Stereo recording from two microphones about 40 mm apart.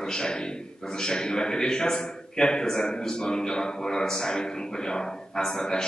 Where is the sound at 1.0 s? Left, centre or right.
Centre.